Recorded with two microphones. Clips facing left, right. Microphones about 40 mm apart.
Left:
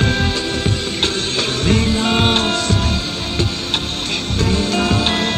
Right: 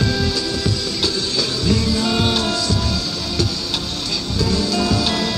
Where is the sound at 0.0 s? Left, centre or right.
Left.